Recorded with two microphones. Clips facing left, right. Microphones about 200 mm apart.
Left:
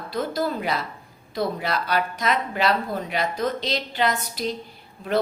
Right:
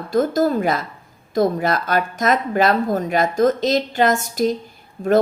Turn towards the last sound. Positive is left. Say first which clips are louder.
# right 11 dB
turn(degrees=-45)  # may be behind; listen again after turning